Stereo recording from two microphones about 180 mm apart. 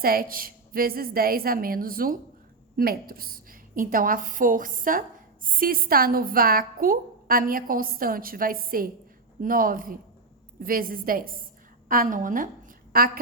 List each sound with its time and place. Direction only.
0.0 s a woman's voice: 55° right (ahead or behind)